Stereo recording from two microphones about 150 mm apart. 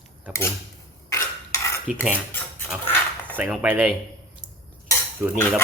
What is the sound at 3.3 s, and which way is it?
Speech, 10° right (ahead or behind).